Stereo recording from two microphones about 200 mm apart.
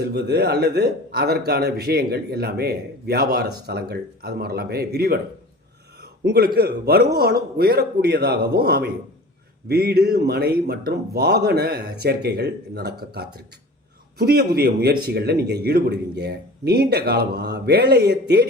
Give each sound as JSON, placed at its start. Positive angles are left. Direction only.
{"t": 0.0, "sound": "a man's voice", "side_deg": -55}